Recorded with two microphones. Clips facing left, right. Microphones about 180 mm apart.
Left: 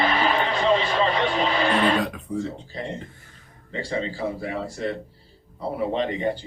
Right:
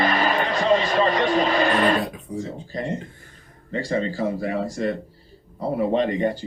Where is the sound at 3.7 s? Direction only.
45° right (ahead or behind).